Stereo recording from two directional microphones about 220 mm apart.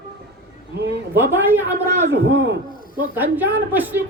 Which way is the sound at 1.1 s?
10° right (ahead or behind).